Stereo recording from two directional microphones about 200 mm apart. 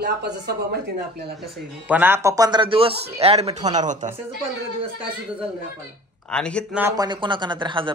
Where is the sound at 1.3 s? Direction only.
Centre (ahead or behind); by 4.1 s 40° right (ahead or behind).